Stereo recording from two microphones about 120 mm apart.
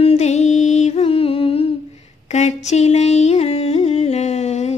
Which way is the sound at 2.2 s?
75° left (ahead or behind).